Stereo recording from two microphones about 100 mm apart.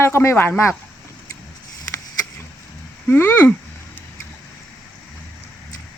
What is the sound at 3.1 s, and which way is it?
Speech, 20° left (ahead or behind).